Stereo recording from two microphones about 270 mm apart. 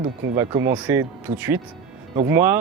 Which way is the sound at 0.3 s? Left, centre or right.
Centre.